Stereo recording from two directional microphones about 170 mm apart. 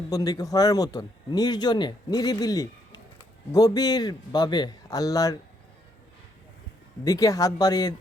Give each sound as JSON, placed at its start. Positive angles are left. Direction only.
{"t": 0.1, "sound": "speech", "side_deg": 20}
{"t": 7.0, "sound": "speech", "side_deg": 20}